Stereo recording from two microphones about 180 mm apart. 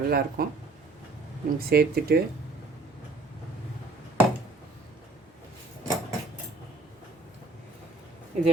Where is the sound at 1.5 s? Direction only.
60° right (ahead or behind).